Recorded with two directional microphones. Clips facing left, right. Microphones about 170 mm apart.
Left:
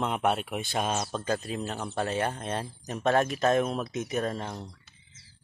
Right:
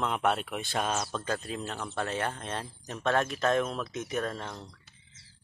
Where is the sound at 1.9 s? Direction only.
30° left (ahead or behind).